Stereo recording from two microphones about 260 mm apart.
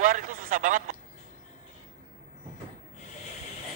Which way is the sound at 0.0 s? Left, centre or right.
Right.